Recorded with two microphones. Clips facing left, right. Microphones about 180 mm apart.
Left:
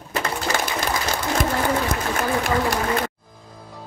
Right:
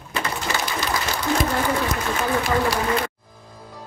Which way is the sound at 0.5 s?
50° left (ahead or behind).